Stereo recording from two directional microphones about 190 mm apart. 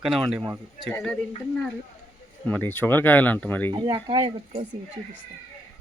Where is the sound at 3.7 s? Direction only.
25° right (ahead or behind).